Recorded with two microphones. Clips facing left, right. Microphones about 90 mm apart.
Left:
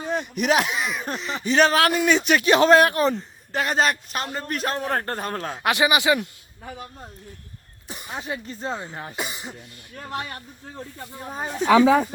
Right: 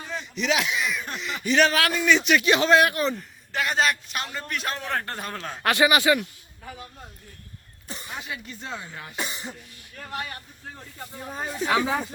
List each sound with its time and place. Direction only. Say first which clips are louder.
0.1 s speech: left 5 dB; 50° left (ahead or behind)
5.6 s speech: even; 20° left (ahead or behind)
7.9 s cough: left 1 dB; 15° left (ahead or behind)
8.1 s speech: left 6 dB; 35° left (ahead or behind)
9.1 s cough: right 1 dB; 5° left (ahead or behind)
9.9 s speech: left 2 dB; 30° left (ahead or behind)
11.2 s speech: left 2 dB; 5° left (ahead or behind)